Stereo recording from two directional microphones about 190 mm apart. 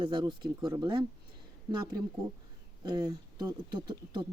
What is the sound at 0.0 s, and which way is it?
Speech, 25° right (ahead or behind).